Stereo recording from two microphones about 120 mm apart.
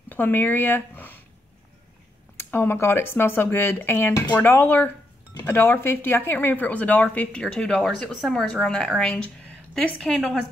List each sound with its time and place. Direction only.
0.1 s speech: 15° left (ahead or behind)
2.3 s speech: 20° left (ahead or behind); by 10.4 s centre (ahead or behind)